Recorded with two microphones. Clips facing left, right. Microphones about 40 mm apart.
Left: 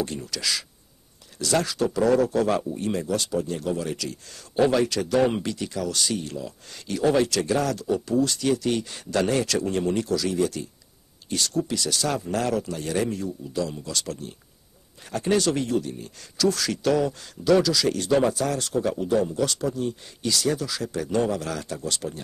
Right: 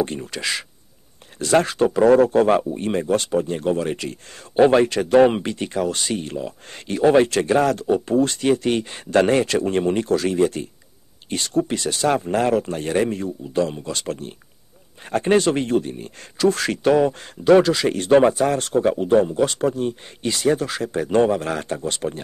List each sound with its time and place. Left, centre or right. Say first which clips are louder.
0.0 s speech: right 5 dB; right